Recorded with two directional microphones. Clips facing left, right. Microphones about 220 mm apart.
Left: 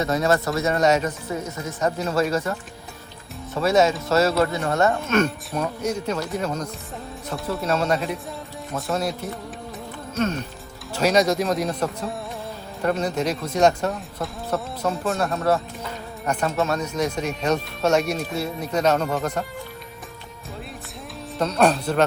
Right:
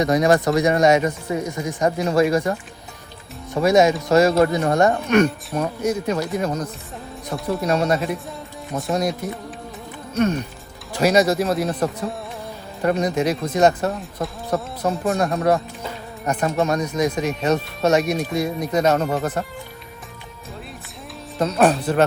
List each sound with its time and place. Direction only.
0.0 s speech: 15° right (ahead or behind)
10.2 s speech: 10° right (ahead or behind)
12.8 s speech: 10° right (ahead or behind)
21.3 s speech: 5° right (ahead or behind)